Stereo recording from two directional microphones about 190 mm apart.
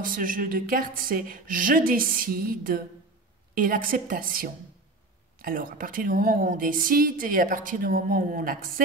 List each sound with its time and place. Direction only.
0.0 s a woman's voice: 45° right (ahead or behind)